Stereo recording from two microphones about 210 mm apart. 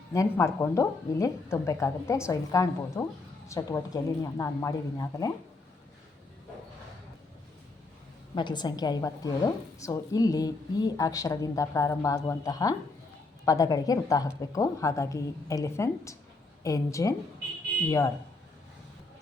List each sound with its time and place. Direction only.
0.1 s a woman's voice: 15° left (ahead or behind)
8.4 s a woman's voice: 20° left (ahead or behind)